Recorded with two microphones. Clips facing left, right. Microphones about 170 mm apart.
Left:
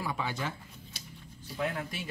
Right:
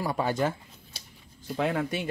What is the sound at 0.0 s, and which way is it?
Speech, 40° right (ahead or behind).